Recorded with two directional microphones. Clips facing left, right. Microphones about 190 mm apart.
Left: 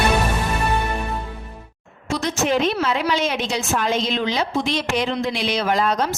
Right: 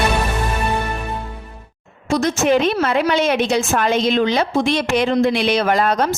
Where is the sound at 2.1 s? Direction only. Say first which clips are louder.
Right 5 dB; 45° right (ahead or behind).